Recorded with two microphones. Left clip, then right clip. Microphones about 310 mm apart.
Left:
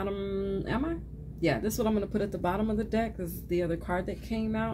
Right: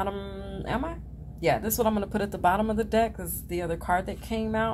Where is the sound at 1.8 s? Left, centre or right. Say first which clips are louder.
Right 3 dB; right.